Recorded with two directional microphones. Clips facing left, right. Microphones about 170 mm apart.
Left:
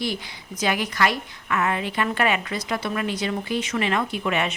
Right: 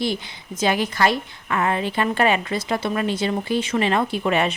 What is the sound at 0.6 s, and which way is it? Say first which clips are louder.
A woman's voice: right 3 dB; 30° right (ahead or behind).